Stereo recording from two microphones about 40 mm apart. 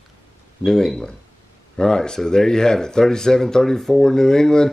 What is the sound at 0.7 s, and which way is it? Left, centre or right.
Speech, centre.